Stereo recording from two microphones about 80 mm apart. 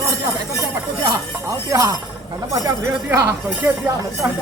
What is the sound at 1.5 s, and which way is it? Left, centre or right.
Speech, right.